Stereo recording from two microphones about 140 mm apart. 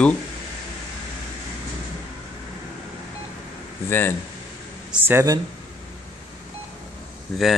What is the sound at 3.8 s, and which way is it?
Speech, 15° left (ahead or behind).